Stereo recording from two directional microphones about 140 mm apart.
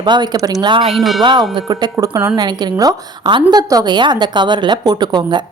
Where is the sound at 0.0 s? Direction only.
30° right (ahead or behind).